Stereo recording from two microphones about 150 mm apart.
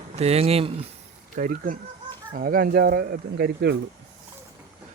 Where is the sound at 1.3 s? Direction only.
65° right (ahead or behind).